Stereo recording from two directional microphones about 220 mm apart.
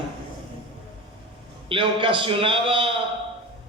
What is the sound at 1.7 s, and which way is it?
A man's voice, 25° right (ahead or behind).